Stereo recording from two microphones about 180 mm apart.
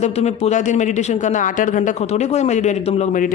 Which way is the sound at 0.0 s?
35° left (ahead or behind).